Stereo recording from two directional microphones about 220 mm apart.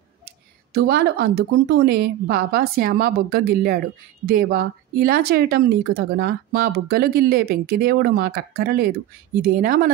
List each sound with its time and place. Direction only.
0.7 s speech: 45° right (ahead or behind)